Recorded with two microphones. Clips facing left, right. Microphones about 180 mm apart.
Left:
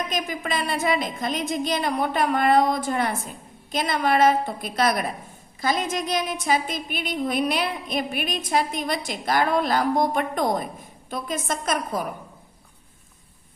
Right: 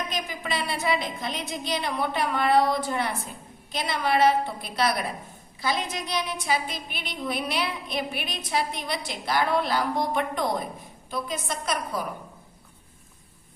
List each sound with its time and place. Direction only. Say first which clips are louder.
0.1 s a woman's voice: left 4 dB; 45° left (ahead or behind)